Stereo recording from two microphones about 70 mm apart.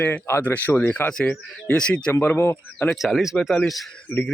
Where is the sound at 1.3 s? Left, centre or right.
Centre.